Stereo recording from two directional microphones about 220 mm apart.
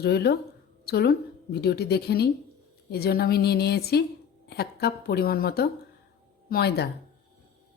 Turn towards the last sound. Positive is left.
turn(degrees=45)  # may be behind; listen again after turning